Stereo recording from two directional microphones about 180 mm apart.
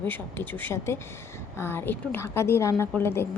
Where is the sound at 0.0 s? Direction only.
10° left (ahead or behind).